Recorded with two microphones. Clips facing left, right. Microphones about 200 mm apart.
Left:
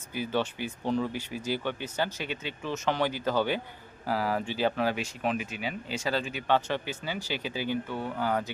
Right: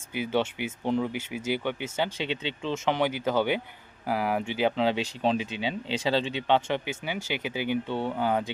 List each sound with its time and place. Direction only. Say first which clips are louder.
0.1 s speech: right 3 dB; 20° right (ahead or behind)